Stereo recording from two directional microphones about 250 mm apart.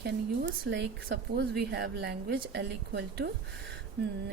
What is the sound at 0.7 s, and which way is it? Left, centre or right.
A woman's voice, right.